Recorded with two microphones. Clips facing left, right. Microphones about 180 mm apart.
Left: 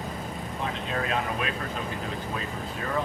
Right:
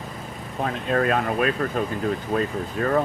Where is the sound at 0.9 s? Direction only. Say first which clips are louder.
Right 9 dB; 55° right (ahead or behind).